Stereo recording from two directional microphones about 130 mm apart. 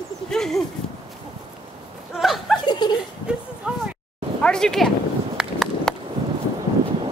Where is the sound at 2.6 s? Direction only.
35° left (ahead or behind).